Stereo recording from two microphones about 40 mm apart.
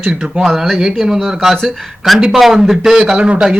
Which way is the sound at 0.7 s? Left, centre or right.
Centre.